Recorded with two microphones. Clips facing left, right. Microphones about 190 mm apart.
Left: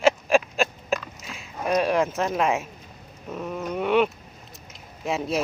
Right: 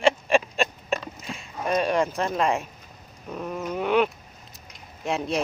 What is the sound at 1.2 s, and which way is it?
Speech, centre (ahead or behind).